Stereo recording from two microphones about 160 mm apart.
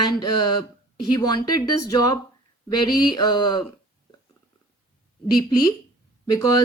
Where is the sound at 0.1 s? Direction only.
25° left (ahead or behind).